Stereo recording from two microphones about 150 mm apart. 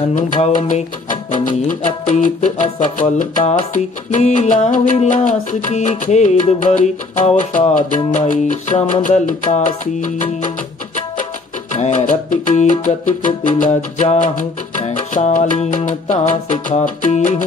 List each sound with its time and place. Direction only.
0.7 s music: 55° left (ahead or behind)
11.7 s music: 55° left (ahead or behind)